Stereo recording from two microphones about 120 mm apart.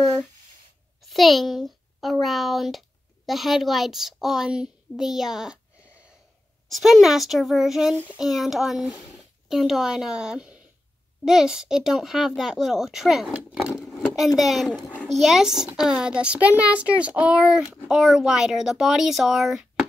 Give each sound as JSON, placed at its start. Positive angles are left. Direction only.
{"t": 1.0, "sound": "a child's voice", "side_deg": 0}
{"t": 6.7, "sound": "a child's voice", "side_deg": 0}
{"t": 7.9, "sound": "a child's voice", "side_deg": -15}
{"t": 8.2, "sound": "a child's voice", "side_deg": 0}